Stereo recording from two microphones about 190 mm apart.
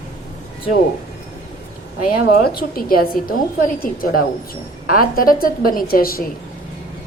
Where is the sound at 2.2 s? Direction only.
55° left (ahead or behind).